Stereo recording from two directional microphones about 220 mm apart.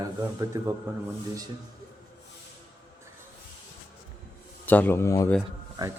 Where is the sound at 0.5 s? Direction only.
20° right (ahead or behind).